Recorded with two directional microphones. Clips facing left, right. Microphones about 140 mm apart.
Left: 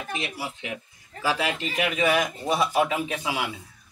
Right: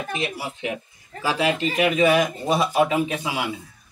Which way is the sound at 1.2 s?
20° right (ahead or behind).